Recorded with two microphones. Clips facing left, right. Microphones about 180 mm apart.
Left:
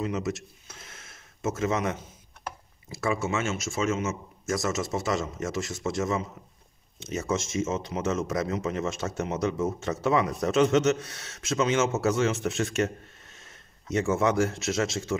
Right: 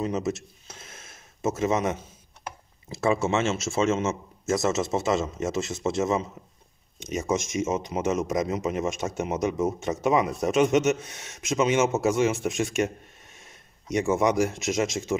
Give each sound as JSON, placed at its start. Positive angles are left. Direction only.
{"t": 0.0, "sound": "speech", "side_deg": -25}